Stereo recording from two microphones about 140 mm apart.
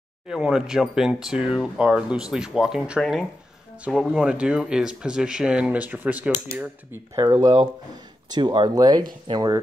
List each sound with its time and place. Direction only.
0.3 s speech: 5° right (ahead or behind); by 9.6 s 25° right (ahead or behind)